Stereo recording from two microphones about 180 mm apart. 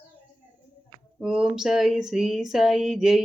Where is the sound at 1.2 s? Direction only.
5° right (ahead or behind).